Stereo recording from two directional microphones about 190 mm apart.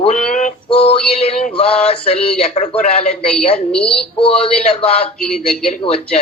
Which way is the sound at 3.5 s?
5° left (ahead or behind).